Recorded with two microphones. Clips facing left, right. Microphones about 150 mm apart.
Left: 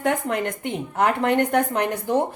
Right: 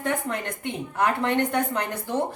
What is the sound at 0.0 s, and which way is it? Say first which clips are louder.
Speech: left 4 dB; 65° left (ahead or behind).